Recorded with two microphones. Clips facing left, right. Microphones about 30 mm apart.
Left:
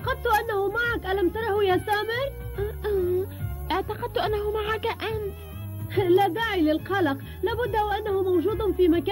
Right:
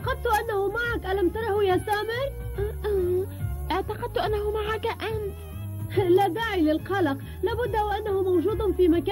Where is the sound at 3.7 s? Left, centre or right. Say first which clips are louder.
Left 1 dB; centre.